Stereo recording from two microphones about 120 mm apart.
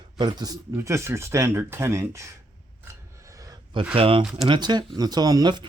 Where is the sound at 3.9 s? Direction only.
50° right (ahead or behind).